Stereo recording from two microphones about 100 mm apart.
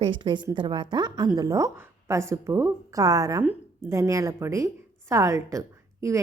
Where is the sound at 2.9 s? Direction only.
35° right (ahead or behind).